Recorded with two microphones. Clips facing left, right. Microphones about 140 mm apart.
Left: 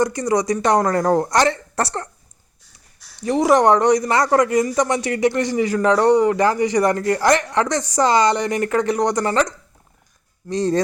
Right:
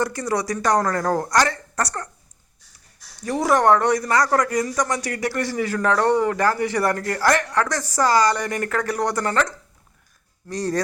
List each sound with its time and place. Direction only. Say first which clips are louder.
0.0 s a woman's voice: left 5 dB; 15° left (ahead or behind)
3.2 s a woman's voice: left 4 dB; 20° left (ahead or behind)